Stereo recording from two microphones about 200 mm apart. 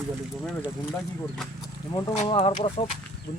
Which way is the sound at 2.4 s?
30° left (ahead or behind).